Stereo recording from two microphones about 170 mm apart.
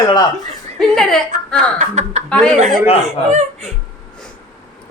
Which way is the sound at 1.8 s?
40° right (ahead or behind).